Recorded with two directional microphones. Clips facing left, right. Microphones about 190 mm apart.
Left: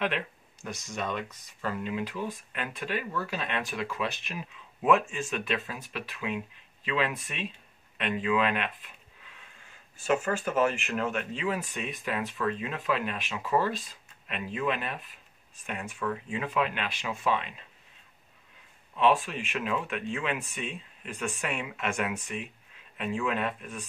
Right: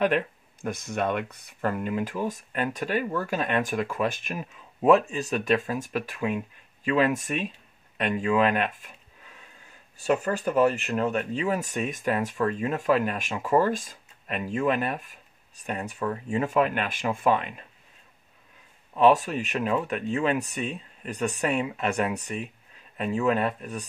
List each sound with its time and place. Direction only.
0.0 s speech: 50° right (ahead or behind)
9.9 s speech: 35° right (ahead or behind)
18.9 s speech: 40° right (ahead or behind)